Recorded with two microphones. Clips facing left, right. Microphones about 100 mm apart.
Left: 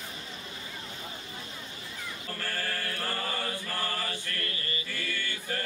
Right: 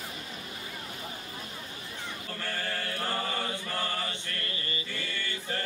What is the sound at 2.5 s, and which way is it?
Mantra, 25° right (ahead or behind).